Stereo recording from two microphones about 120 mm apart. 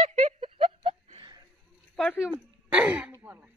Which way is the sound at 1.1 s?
40° right (ahead or behind).